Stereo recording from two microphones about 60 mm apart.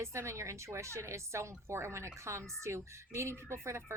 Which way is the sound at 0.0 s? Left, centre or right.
Right.